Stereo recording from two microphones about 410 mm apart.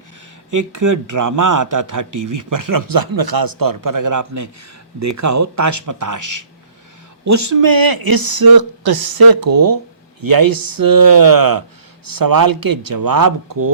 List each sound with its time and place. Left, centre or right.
0.5 s a man's voice: right